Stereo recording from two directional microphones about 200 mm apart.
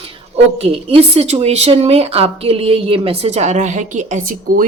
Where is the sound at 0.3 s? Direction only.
30° right (ahead or behind).